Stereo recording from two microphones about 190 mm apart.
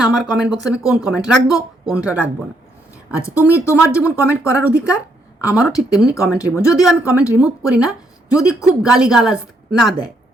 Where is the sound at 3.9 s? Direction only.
5° right (ahead or behind).